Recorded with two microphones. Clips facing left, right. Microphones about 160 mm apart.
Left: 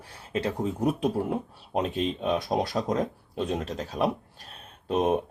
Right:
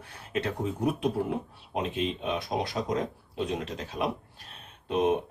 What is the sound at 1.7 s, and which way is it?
Speech, 40° left (ahead or behind).